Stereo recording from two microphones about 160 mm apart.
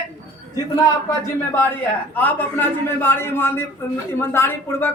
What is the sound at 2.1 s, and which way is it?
A man's voice, 10° left (ahead or behind).